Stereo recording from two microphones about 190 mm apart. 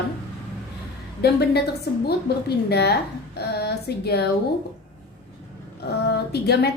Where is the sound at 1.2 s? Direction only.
60° left (ahead or behind).